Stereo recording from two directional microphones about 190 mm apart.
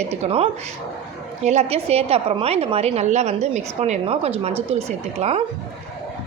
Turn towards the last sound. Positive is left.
turn(degrees=-30)  # may be behind; listen again after turning